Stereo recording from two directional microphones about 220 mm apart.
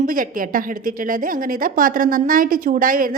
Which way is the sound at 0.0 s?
40° right (ahead or behind).